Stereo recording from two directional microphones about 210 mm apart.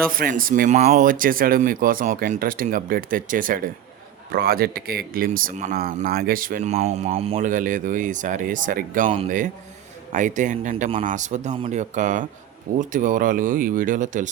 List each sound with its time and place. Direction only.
0.1 s speech: 40° right (ahead or behind)